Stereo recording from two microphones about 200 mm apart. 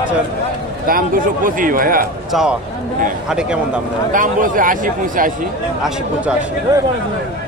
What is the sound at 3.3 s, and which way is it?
Speech, 5° right (ahead or behind).